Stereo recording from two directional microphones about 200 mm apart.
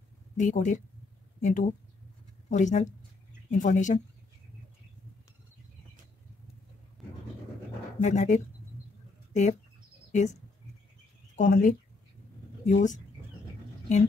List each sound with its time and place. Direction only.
0.4 s speech: 40° left (ahead or behind)
7.0 s a sound: centre (ahead or behind)
8.0 s speech: 35° left (ahead or behind)